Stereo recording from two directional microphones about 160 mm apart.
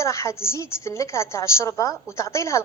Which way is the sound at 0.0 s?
20° left (ahead or behind).